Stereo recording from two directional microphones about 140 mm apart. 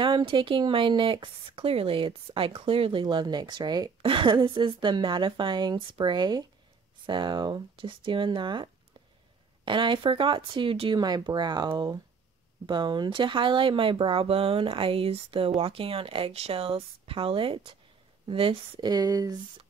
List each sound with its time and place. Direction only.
0.0 s speech: 35° right (ahead or behind)
9.7 s speech: 35° right (ahead or behind)